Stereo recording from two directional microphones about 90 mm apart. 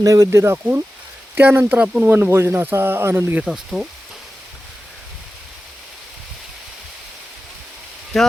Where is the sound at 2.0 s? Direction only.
25° right (ahead or behind).